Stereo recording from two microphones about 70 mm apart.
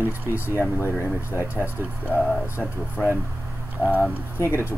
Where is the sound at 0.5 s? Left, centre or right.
Left.